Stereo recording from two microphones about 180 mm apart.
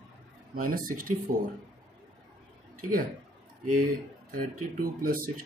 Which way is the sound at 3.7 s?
50° right (ahead or behind).